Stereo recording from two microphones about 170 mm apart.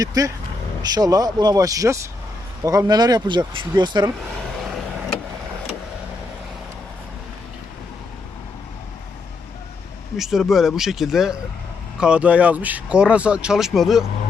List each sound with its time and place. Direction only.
0.0 s speech: 20° right (ahead or behind)
10.2 s speech: centre (ahead or behind)